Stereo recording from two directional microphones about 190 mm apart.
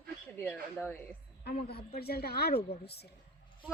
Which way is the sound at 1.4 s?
55° left (ahead or behind).